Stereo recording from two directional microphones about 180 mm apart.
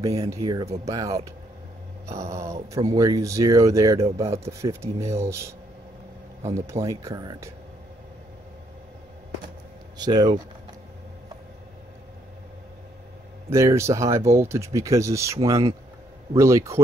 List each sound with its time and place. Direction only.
0.0 s speech: 20° right (ahead or behind)
9.9 s speech: 20° right (ahead or behind)
13.5 s speech: 15° right (ahead or behind)